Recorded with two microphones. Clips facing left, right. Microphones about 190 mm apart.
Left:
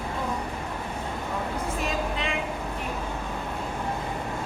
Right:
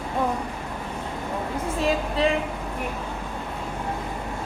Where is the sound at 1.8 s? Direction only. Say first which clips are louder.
Right 10 dB; 35° right (ahead or behind).